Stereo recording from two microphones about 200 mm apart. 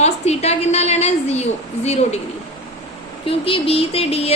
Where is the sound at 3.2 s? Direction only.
25° left (ahead or behind).